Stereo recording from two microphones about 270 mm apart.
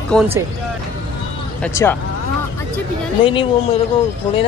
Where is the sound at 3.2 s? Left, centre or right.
Centre.